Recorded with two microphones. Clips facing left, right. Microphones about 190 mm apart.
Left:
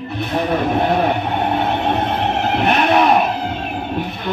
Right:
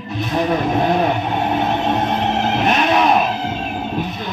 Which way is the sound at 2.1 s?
60° left (ahead or behind).